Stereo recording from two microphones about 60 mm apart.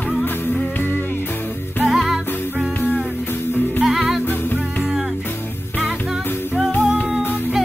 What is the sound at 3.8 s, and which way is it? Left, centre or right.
Music, centre.